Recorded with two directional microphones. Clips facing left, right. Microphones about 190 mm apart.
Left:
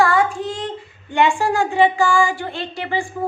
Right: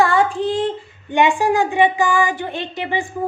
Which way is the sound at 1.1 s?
15° right (ahead or behind).